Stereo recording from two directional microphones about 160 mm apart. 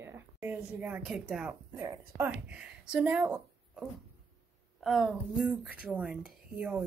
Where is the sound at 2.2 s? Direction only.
5° right (ahead or behind).